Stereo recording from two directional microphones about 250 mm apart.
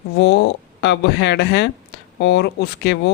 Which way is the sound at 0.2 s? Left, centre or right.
Left.